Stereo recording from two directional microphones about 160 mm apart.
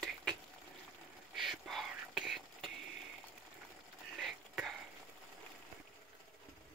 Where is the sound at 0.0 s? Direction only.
5° left (ahead or behind).